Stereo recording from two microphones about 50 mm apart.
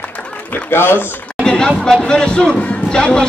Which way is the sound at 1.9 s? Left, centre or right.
Centre.